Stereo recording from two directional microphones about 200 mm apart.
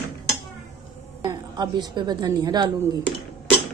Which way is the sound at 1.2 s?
20° right (ahead or behind).